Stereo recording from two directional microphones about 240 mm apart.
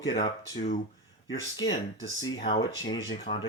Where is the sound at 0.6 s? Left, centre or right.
Left.